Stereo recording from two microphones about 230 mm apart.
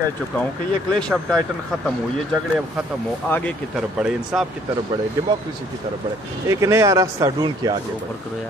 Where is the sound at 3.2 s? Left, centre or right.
Centre.